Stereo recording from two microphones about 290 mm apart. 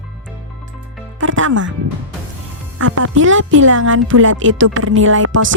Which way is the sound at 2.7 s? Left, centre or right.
Right.